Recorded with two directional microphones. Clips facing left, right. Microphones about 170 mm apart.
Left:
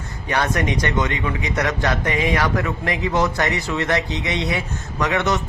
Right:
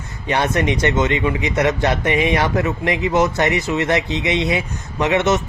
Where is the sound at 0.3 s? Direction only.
20° right (ahead or behind).